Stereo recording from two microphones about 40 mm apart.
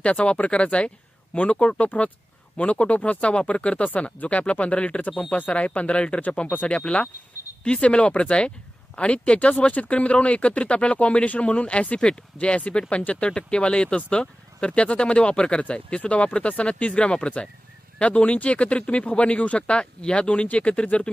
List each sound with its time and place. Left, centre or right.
0.0 s speech: left
1.9 s speech: left
2.5 s speech: left